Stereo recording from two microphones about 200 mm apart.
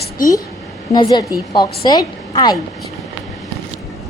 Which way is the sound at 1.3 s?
20° left (ahead or behind).